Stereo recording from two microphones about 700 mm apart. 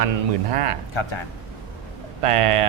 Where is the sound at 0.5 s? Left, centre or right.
Right.